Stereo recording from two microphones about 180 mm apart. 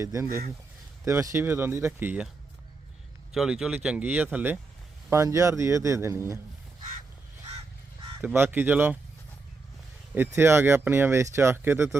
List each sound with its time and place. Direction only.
0.0 s speech: 15° right (ahead or behind)
3.3 s speech: centre (ahead or behind)
8.2 s speech: 10° right (ahead or behind)
10.2 s speech: 15° right (ahead or behind)